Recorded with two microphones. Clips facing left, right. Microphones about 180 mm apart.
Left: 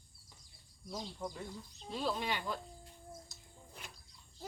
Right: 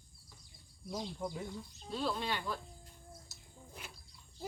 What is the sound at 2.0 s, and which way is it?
Speech, 15° left (ahead or behind).